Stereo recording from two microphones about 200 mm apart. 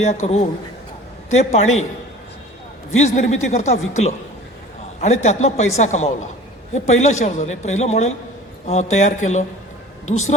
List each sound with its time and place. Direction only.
0.0 s a man's voice: 35° left (ahead or behind)
3.0 s a man's voice: 35° left (ahead or behind)